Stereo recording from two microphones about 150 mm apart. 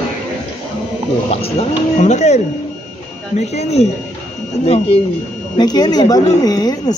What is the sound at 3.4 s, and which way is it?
Speech, 45° left (ahead or behind).